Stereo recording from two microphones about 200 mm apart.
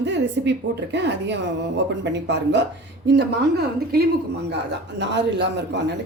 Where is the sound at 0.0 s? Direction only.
60° right (ahead or behind).